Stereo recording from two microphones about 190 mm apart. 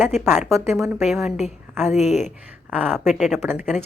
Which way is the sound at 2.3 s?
10° right (ahead or behind).